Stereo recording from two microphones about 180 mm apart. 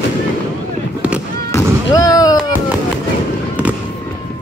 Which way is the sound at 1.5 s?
20° left (ahead or behind).